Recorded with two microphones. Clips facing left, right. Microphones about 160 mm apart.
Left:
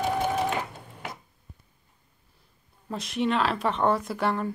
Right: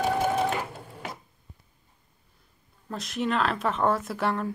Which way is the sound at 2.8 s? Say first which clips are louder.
Left 2 dB; centre (ahead or behind).